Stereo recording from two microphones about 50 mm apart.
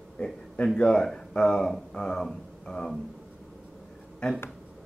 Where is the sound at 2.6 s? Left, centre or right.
Centre.